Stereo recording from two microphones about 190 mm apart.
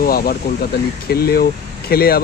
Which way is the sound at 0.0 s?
50° left (ahead or behind).